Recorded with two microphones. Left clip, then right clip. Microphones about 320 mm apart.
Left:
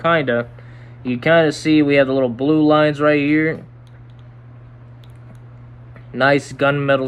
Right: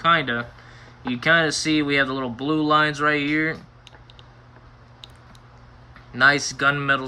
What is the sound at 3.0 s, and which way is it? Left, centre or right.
Speech, left.